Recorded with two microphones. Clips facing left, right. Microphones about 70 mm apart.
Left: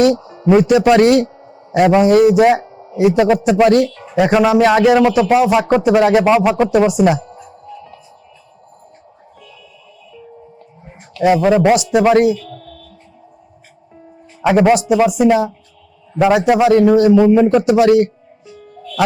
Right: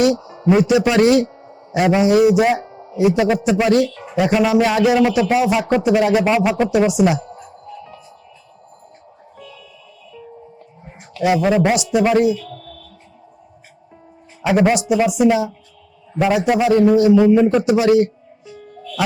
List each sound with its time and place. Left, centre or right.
0.2 s a sound: centre
0.4 s a man's voice: left
6.0 s speech: left
6.2 s a man's voice: left
11.2 s speech: left
11.5 s a man's voice: left
11.9 s speech: left
14.4 s a man's voice: left
16.1 s a man's voice: left
16.9 s a man's voice: left
18.8 s music: left